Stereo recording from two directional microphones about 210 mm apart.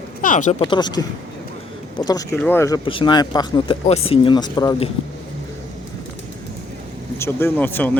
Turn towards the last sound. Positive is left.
turn(degrees=10)  # may be behind; listen again after turning